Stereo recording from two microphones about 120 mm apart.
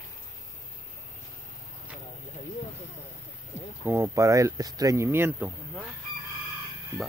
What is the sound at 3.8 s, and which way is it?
Speech, 20° right (ahead or behind).